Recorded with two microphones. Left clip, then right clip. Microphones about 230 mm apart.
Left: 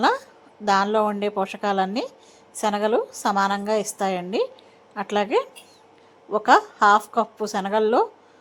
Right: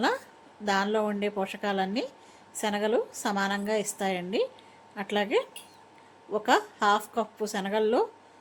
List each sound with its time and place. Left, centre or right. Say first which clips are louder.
0.6 s a woman's voice: left 7 dB; centre